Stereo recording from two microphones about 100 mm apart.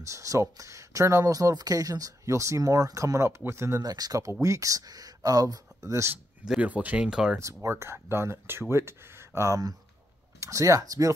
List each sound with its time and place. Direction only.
0.0 s speech: 30° right (ahead or behind)
3.9 s speech: 40° right (ahead or behind)
6.4 s speech: 10° right (ahead or behind)
7.3 s speech: 30° right (ahead or behind)